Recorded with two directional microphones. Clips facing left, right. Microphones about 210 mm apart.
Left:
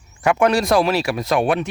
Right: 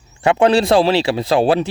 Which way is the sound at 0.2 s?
30° right (ahead or behind).